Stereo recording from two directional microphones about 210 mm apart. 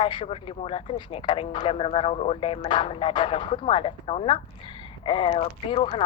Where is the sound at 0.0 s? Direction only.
25° left (ahead or behind).